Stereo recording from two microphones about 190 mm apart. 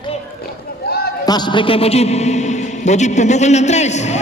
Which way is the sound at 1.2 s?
20° left (ahead or behind).